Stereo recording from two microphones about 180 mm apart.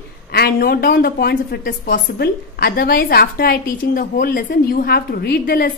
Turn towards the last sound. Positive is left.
turn(degrees=55)  # may be behind; listen again after turning